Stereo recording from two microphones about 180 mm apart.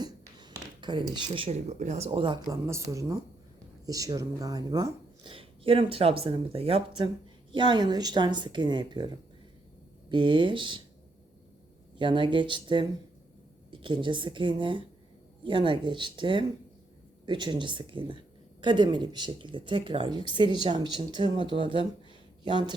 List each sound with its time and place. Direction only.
0.0 s speech: 25° right (ahead or behind)
10.1 s speech: 25° right (ahead or behind)
11.9 s speech: 25° right (ahead or behind)